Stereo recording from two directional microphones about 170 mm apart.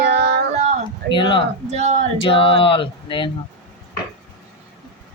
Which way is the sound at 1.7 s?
40° right (ahead or behind).